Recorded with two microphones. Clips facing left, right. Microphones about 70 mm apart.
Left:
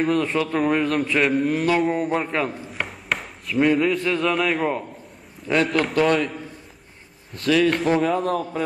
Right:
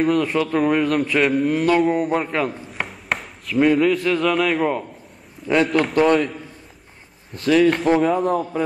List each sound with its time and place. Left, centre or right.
0.0 s a man's voice: centre
7.7 s a man's voice: centre
8.3 s a man's voice: centre